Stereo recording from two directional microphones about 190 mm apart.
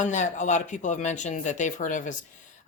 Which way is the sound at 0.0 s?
40° left (ahead or behind).